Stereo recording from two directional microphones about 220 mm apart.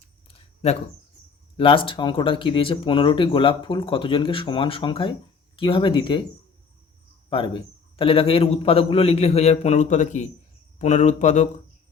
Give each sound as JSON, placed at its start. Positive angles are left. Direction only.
{"t": 0.3, "sound": "a sound", "side_deg": 30}
{"t": 1.5, "sound": "speech", "side_deg": 25}
{"t": 7.3, "sound": "speech", "side_deg": 20}